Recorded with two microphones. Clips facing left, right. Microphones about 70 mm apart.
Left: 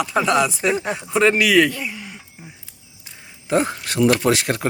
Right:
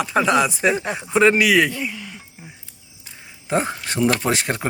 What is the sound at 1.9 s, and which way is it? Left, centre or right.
Speech, centre.